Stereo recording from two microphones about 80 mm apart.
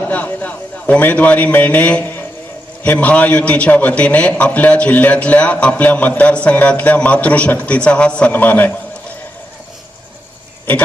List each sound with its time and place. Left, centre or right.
0.1 s a man's voice: centre